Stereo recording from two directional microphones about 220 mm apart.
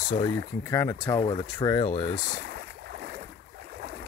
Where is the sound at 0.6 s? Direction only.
15° left (ahead or behind).